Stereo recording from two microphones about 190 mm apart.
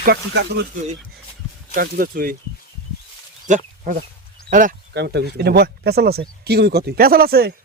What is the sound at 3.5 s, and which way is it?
Speech, 40° right (ahead or behind).